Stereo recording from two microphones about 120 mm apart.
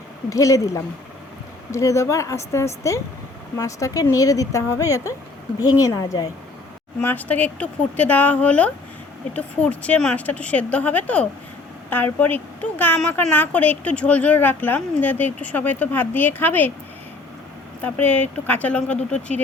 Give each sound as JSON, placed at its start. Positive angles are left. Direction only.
{"t": 0.3, "sound": "a woman's voice", "side_deg": 25}
{"t": 7.0, "sound": "speech", "side_deg": 15}
{"t": 17.8, "sound": "speech", "side_deg": 15}